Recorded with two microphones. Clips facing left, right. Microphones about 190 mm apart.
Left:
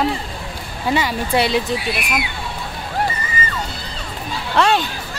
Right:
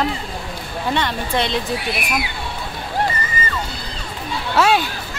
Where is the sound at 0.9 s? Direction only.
5° left (ahead or behind).